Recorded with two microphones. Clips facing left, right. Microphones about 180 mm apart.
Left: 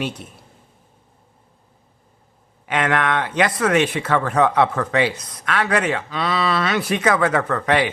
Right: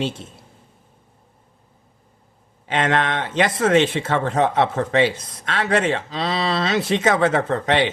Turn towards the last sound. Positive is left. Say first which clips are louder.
# even
turn(degrees=-25)  # may be behind; listen again after turning